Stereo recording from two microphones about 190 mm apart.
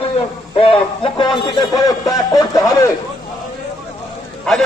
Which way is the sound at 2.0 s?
20° left (ahead or behind).